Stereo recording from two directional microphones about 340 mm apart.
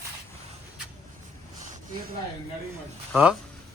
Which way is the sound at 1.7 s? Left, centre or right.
Right.